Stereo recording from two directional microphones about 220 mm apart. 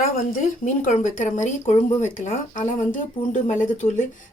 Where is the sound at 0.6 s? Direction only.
35° left (ahead or behind).